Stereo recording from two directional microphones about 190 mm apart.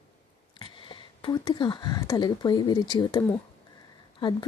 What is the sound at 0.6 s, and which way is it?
Speech, 25° left (ahead or behind).